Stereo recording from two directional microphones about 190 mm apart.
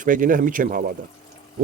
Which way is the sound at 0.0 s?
45° right (ahead or behind).